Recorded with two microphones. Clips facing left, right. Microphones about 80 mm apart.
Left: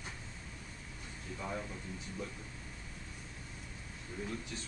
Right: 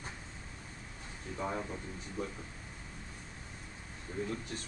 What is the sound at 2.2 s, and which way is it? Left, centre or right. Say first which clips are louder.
Speech: right 6 dB; right.